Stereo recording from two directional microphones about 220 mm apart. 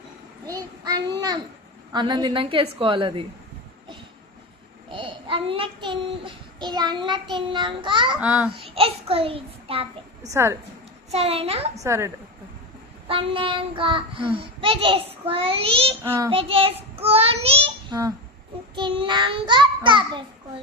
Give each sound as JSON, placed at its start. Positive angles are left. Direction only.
{"t": 0.4, "sound": "a child's voice", "side_deg": -15}
{"t": 1.9, "sound": "child singing", "side_deg": -20}
{"t": 4.9, "sound": "child singing", "side_deg": -25}
{"t": 8.2, "sound": "a child's voice", "side_deg": -5}
{"t": 8.5, "sound": "a child's voice", "side_deg": -25}
{"t": 10.2, "sound": "a child's voice", "side_deg": -15}
{"t": 11.1, "sound": "child singing", "side_deg": -25}
{"t": 11.8, "sound": "a child's voice", "side_deg": -15}
{"t": 13.1, "sound": "child singing", "side_deg": -25}
{"t": 16.0, "sound": "a child's voice", "side_deg": -15}
{"t": 16.3, "sound": "child singing", "side_deg": -25}